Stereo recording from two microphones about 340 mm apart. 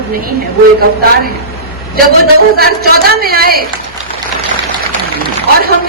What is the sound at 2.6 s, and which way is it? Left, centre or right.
A woman's voice, right.